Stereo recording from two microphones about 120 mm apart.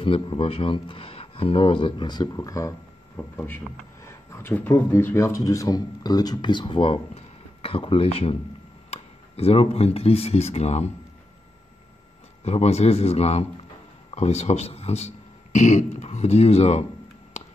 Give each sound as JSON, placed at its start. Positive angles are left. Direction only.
{"t": 0.0, "sound": "a man's voice", "side_deg": 50}
{"t": 12.4, "sound": "a man's voice", "side_deg": 65}